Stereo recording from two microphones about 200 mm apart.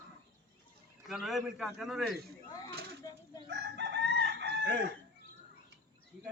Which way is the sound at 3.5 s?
60° right (ahead or behind).